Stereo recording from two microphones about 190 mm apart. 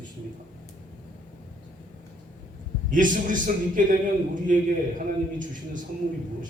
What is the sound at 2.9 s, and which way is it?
A man's voice, 45° right (ahead or behind).